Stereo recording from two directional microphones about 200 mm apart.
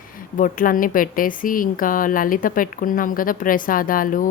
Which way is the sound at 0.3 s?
40° left (ahead or behind).